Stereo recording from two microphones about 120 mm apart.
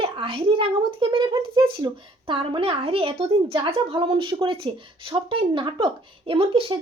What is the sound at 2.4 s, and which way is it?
Speech, 50° right (ahead or behind).